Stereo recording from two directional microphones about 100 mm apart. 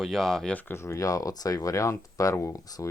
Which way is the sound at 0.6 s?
25° left (ahead or behind).